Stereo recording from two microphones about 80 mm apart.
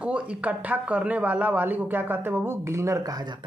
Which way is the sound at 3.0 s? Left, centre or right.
Right.